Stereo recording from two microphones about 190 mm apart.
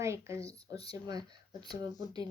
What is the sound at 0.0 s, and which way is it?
Speech, 15° right (ahead or behind).